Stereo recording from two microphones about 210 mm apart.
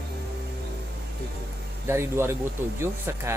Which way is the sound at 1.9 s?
10° right (ahead or behind).